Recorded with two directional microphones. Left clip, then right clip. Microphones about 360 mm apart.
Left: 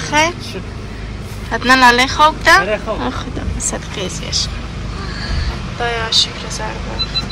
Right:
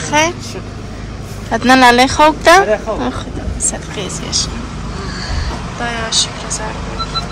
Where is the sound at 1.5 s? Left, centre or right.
Centre.